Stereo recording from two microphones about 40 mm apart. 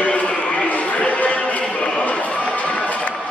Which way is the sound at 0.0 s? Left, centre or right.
Left.